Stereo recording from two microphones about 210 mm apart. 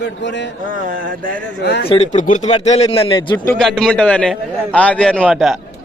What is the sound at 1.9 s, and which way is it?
Speech, 35° left (ahead or behind).